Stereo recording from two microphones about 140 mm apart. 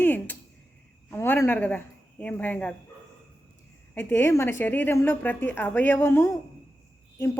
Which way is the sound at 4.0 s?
15° left (ahead or behind).